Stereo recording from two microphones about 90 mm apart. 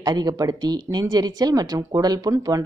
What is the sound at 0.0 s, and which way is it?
Speech, 45° right (ahead or behind).